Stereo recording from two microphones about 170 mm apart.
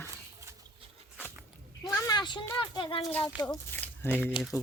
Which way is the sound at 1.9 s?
20° left (ahead or behind).